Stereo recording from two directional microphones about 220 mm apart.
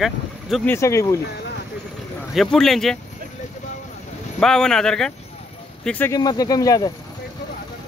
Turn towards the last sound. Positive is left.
turn(degrees=15)  # may be behind; listen again after turning